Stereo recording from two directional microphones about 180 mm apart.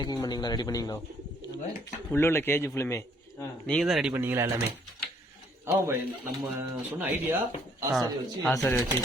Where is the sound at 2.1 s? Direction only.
15° left (ahead or behind).